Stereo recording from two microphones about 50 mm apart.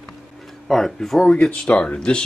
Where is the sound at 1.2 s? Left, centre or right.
Centre.